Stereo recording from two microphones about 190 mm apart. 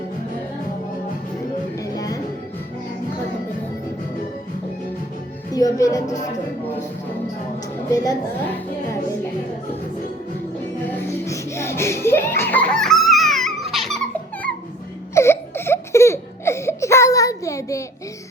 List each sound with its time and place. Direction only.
1.7 s music: 20° left (ahead or behind)
5.5 s speech: 20° left (ahead or behind)
7.9 s a woman's voice: 15° left (ahead or behind)
10.9 s music: 15° left (ahead or behind)
15.1 s crying: 15° left (ahead or behind)